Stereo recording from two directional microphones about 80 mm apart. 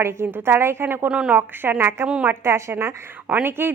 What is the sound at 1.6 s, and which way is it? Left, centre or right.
A woman's voice, right.